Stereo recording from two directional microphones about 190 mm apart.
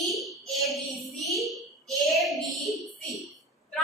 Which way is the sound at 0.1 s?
Centre (ahead or behind).